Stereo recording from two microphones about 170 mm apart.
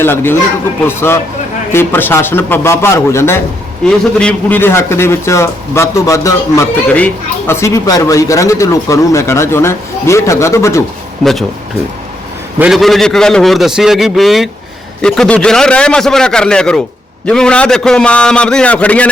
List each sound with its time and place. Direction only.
0.0 s a man's voice: 15° left (ahead or behind)
11.2 s a man's voice: centre (ahead or behind)
12.5 s a man's voice: 5° right (ahead or behind)